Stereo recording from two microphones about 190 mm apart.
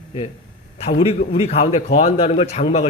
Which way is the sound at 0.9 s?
30° left (ahead or behind).